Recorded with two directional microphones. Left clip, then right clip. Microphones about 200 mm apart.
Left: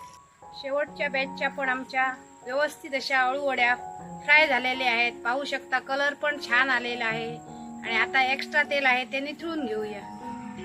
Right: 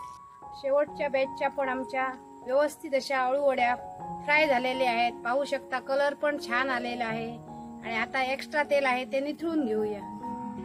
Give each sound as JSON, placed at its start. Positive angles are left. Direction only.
{"t": 0.6, "sound": "speech", "side_deg": -55}